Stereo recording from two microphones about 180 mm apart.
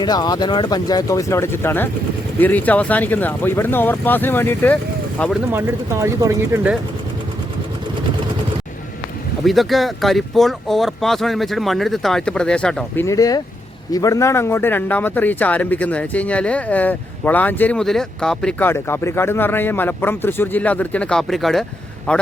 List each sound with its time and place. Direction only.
0.0 s a man's voice: 20° left (ahead or behind)
5.5 s speech: 15° right (ahead or behind)
9.4 s speech: centre (ahead or behind)
13.1 s a man's voice: 20° left (ahead or behind)